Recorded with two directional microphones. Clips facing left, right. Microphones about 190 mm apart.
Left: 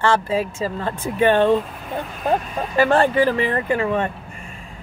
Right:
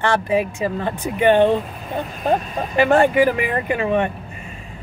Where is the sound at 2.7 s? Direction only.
15° right (ahead or behind).